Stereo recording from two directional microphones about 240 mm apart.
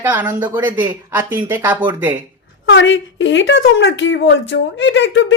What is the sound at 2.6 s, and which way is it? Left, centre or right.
A woman's voice, left.